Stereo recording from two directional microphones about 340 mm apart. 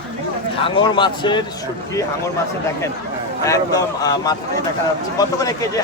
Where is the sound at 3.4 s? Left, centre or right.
Centre.